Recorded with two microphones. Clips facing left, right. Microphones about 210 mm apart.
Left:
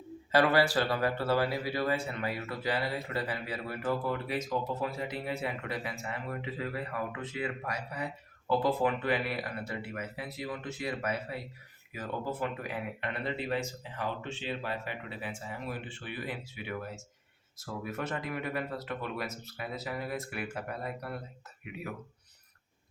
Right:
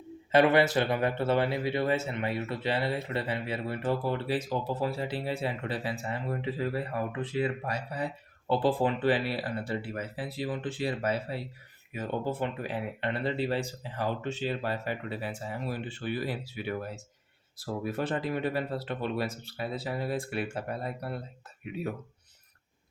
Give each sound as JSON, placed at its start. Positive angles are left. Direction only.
{"t": 0.3, "sound": "speech", "side_deg": -20}